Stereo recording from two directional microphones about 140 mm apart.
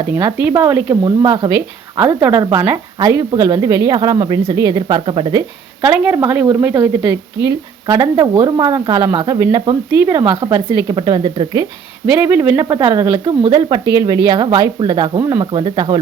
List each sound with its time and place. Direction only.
0.1 s speech: 20° right (ahead or behind)
1.0 s speech: 30° right (ahead or behind)
2.0 s speech: 10° right (ahead or behind); by 5.9 s 25° right (ahead or behind)
5.9 s speech: 10° right (ahead or behind); by 11.7 s 30° right (ahead or behind)
12.2 s speech: 15° right (ahead or behind)